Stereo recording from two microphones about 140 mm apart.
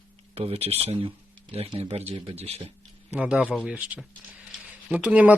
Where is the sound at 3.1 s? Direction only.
10° right (ahead or behind).